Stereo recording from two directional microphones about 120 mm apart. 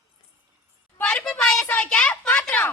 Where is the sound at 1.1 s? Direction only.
5° left (ahead or behind).